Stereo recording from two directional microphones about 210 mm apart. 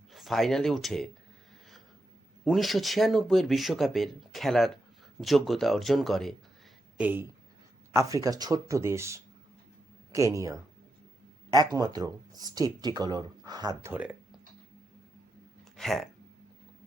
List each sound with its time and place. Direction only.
0.1 s speech: centre (ahead or behind)
2.4 s speech: centre (ahead or behind)
11.7 s speech: 20° right (ahead or behind)
15.7 s a sound: centre (ahead or behind)